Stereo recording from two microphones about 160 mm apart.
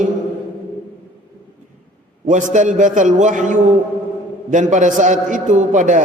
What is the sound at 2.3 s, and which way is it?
A man's voice, 50° right (ahead or behind).